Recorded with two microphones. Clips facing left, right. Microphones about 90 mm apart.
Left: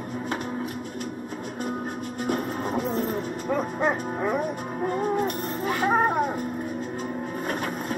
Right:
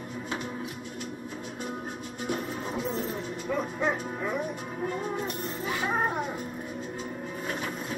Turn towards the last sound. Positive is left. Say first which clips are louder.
# left 5 dB
turn(degrees=50)  # may be behind; listen again after turning